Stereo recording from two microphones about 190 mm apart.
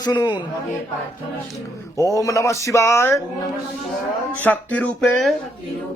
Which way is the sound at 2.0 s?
15° left (ahead or behind).